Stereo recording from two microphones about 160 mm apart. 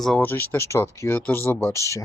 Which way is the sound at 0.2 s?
15° left (ahead or behind).